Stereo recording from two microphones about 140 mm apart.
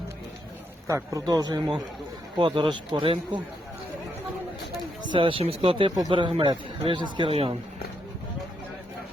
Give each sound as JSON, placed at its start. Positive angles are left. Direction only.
{"t": 0.9, "sound": "speech", "side_deg": -25}
{"t": 5.0, "sound": "speech", "side_deg": -35}